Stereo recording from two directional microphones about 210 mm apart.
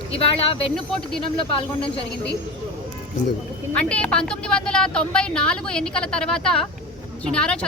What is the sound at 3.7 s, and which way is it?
A woman's voice, 5° left (ahead or behind).